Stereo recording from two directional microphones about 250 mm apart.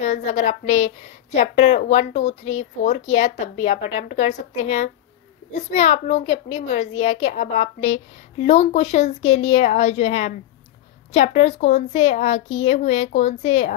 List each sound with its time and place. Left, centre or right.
0.0 s a woman's voice: left